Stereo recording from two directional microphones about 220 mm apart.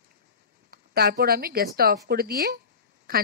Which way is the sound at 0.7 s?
45° right (ahead or behind).